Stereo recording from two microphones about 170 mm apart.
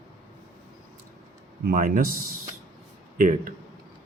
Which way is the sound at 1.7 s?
50° right (ahead or behind).